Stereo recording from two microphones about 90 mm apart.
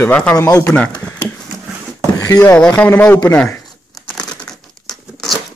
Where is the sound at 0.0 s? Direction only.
20° left (ahead or behind).